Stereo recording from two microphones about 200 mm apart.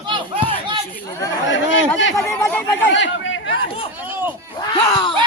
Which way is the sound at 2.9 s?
70° left (ahead or behind).